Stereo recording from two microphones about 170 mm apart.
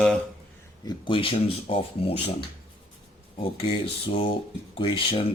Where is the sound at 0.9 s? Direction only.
30° left (ahead or behind).